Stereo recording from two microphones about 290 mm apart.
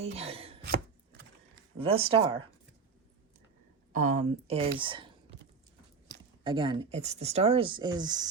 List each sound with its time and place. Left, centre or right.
0.0 s speech: right
0.6 s chopping: right
1.8 s speech: centre
3.9 s speech: right
6.4 s speech: centre